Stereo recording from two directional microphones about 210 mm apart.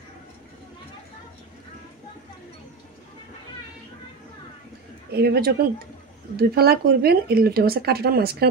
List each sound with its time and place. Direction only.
5.1 s speech: 50° right (ahead or behind)